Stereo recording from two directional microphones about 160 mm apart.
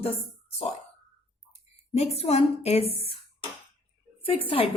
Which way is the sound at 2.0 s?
40° left (ahead or behind).